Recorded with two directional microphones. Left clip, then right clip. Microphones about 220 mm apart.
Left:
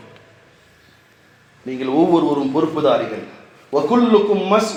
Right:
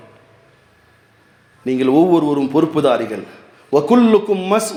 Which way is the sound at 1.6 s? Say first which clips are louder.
Right 4 dB; 50° right (ahead or behind).